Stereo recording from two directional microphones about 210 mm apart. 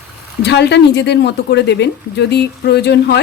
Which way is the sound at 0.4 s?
55° left (ahead or behind).